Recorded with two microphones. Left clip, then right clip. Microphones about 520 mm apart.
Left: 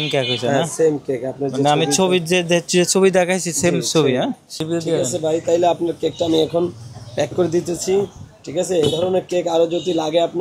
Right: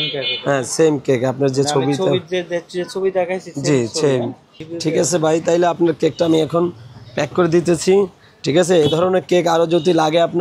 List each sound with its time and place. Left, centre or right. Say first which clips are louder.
0.5 s a man's voice: right 3 dB; right
1.8 s speech: even; left
4.7 s a man's voice: right 3 dB; right
8.5 s a man's voice: right 4 dB; right